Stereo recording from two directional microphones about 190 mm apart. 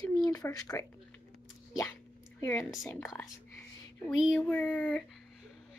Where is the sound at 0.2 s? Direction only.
20° left (ahead or behind).